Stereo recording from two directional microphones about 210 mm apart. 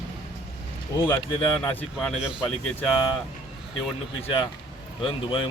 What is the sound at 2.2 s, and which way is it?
Speech, 5° right (ahead or behind).